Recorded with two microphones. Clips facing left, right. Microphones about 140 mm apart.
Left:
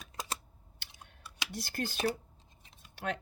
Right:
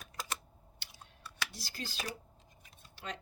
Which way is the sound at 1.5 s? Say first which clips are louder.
Left 7 dB; 55° left (ahead or behind).